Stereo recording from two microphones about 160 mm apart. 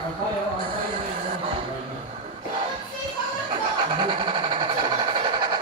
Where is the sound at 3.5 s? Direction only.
30° right (ahead or behind).